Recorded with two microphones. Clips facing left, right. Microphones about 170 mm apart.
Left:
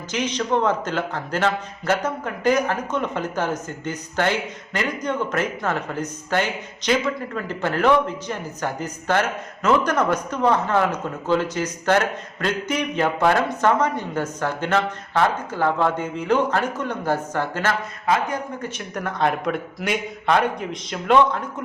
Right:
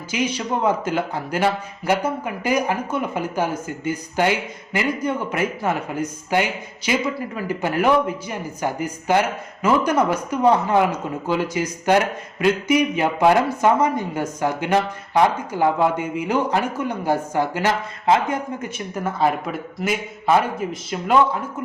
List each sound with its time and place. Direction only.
0.1 s a man's voice: 10° right (ahead or behind)
18.0 s speech: 25° right (ahead or behind)
19.0 s a man's voice: 5° right (ahead or behind)